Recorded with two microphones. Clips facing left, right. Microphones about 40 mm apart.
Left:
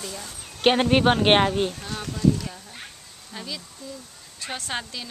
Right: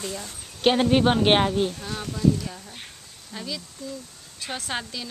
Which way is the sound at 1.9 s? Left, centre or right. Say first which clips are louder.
Even; centre.